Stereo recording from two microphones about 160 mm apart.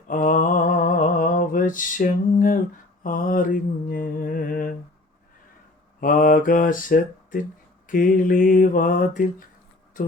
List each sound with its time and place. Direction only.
0.1 s a sound: 55° left (ahead or behind)
3.0 s mantra: 60° left (ahead or behind)
6.0 s mantra: 60° left (ahead or behind)